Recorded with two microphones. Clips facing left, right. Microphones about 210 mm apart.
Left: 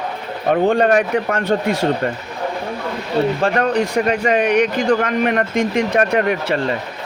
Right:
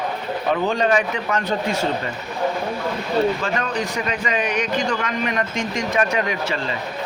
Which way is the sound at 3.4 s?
55° left (ahead or behind).